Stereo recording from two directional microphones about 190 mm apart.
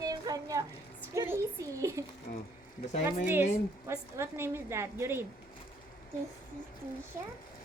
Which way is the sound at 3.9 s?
15° right (ahead or behind).